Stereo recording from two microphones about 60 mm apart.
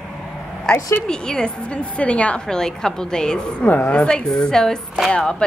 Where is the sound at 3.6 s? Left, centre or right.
Left.